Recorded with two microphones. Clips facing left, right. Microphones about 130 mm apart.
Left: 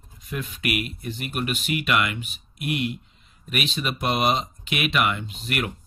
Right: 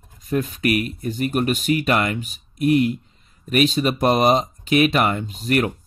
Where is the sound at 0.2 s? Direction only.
40° right (ahead or behind).